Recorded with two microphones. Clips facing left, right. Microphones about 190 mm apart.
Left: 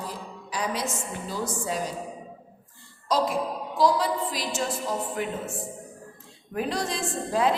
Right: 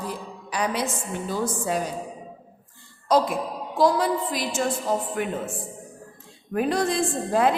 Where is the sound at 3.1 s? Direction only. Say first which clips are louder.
Right 3 dB; 55° right (ahead or behind).